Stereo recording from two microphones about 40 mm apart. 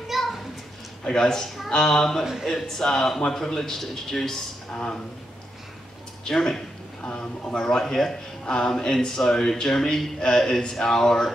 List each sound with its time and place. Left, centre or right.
0.1 s children playing: centre
1.0 s speech: centre
4.7 s a man's voice: centre
6.2 s speech: centre